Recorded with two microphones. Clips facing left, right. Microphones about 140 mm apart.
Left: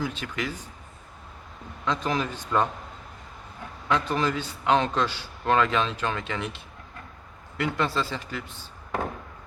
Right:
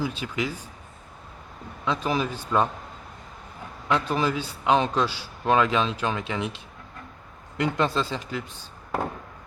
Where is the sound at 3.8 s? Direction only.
10° right (ahead or behind).